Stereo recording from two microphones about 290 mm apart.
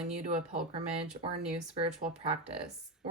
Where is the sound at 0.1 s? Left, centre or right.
Right.